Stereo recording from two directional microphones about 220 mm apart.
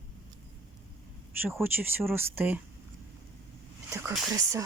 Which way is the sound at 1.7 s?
10° right (ahead or behind).